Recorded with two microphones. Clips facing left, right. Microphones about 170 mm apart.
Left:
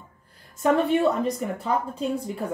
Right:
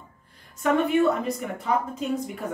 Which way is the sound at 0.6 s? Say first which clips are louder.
Left 1 dB; 35° left (ahead or behind).